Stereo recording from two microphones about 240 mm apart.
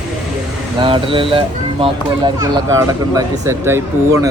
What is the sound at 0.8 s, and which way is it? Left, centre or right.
Speech, right.